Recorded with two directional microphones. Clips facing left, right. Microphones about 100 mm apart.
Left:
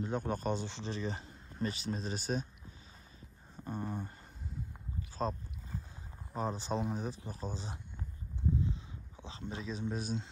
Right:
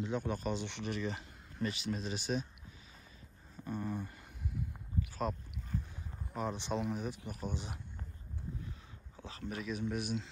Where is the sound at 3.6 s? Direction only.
35° left (ahead or behind).